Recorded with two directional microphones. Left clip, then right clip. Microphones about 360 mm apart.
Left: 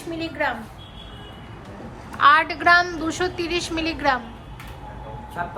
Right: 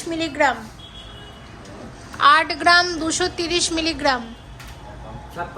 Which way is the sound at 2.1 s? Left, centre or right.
Centre.